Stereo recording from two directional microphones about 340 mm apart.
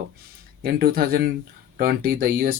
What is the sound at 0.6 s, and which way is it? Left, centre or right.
Speech, right.